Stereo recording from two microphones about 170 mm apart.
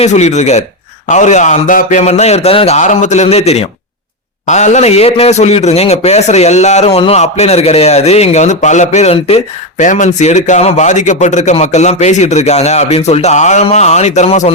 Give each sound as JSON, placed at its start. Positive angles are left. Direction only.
{"t": 0.0, "sound": "a man's voice", "side_deg": 40}